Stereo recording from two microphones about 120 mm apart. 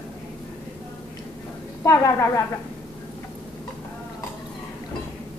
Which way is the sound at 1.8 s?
25° left (ahead or behind).